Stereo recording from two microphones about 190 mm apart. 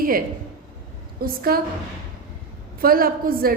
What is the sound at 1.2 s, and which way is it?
Speech, 50° right (ahead or behind).